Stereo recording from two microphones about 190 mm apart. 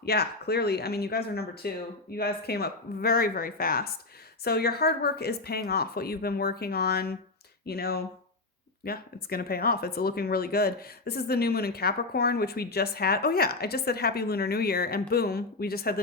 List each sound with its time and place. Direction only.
0.0 s speech: 55° left (ahead or behind)